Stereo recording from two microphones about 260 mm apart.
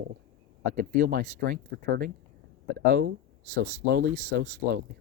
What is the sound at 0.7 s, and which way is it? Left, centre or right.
Speech, right.